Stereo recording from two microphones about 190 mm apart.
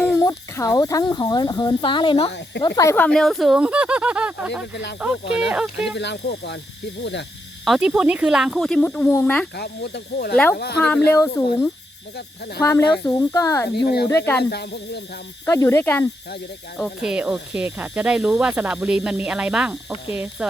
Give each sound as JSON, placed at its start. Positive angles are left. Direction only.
{"t": 0.0, "sound": "speech", "side_deg": 15}
{"t": 2.6, "sound": "speech", "side_deg": 15}
{"t": 4.7, "sound": "speech", "side_deg": 65}
{"t": 5.5, "sound": "speech", "side_deg": -5}
{"t": 6.0, "sound": "speech", "side_deg": 65}
{"t": 7.6, "sound": "speech", "side_deg": -5}
{"t": 9.6, "sound": "speech", "side_deg": 60}
{"t": 10.3, "sound": "speech", "side_deg": 5}
{"t": 12.6, "sound": "speech", "side_deg": 15}
{"t": 13.7, "sound": "speech", "side_deg": 55}
{"t": 14.1, "sound": "speech", "side_deg": 10}
{"t": 14.5, "sound": "speech", "side_deg": 60}
{"t": 15.4, "sound": "speech", "side_deg": 15}
{"t": 16.7, "sound": "speech", "side_deg": 0}